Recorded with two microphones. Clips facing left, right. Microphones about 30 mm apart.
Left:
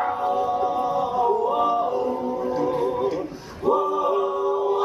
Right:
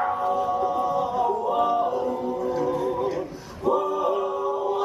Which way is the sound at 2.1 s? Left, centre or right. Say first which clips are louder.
Left 1 dB; centre.